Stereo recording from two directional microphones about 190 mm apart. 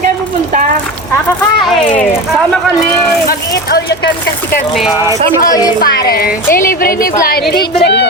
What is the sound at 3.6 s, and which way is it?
Speech, 60° left (ahead or behind).